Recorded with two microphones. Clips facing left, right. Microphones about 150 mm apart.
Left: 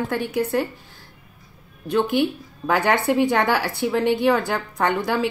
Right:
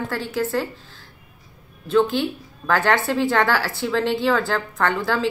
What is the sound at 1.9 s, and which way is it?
A woman's voice, 15° left (ahead or behind).